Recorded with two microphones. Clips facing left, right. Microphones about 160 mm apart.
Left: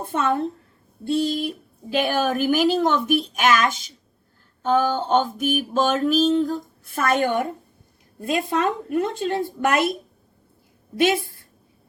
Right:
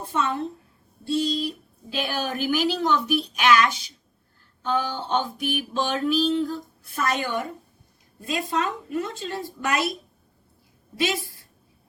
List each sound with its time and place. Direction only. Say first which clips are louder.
0.0 s a woman's voice: left 4 dB; 55° left (ahead or behind)